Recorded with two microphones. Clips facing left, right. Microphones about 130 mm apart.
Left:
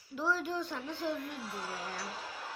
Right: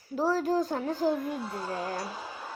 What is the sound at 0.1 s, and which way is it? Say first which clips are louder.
A child's voice: right 8 dB; 40° right (ahead or behind).